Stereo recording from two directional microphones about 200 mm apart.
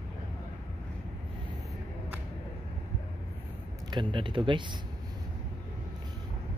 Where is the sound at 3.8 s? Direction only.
25° right (ahead or behind).